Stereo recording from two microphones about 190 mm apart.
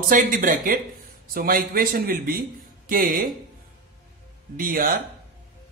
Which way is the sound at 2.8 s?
45° right (ahead or behind).